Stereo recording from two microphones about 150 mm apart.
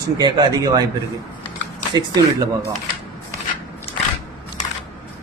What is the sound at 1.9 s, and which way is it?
Speech, 25° right (ahead or behind).